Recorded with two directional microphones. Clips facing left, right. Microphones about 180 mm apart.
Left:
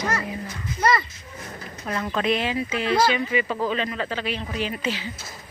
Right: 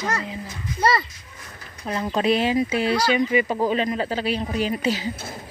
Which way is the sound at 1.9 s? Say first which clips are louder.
Right 3 dB; 30° right (ahead or behind).